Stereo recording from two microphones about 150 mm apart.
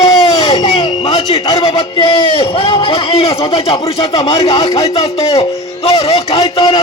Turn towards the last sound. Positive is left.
turn(degrees=40)  # may be behind; listen again after turning